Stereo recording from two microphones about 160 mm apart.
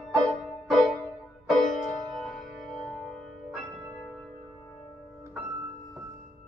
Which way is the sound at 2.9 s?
5° left (ahead or behind).